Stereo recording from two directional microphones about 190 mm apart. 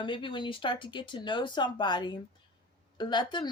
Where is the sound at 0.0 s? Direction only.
25° left (ahead or behind).